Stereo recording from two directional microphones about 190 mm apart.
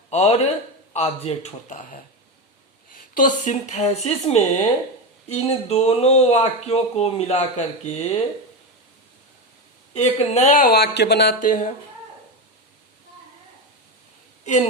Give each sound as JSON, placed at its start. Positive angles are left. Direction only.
{"t": 0.1, "sound": "speech", "side_deg": 35}
{"t": 3.2, "sound": "speech", "side_deg": 40}
{"t": 9.9, "sound": "speech", "side_deg": 35}
{"t": 10.8, "sound": "speech", "side_deg": 60}
{"t": 11.3, "sound": "speech", "side_deg": 45}
{"t": 14.4, "sound": "a woman's voice", "side_deg": 35}